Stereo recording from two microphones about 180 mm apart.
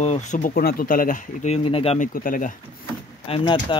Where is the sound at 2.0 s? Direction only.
50° left (ahead or behind).